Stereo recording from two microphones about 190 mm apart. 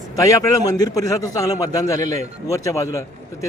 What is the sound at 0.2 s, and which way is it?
A man's voice, 15° left (ahead or behind).